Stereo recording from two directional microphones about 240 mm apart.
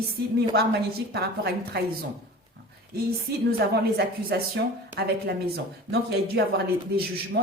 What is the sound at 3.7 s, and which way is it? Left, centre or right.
A woman's voice, right.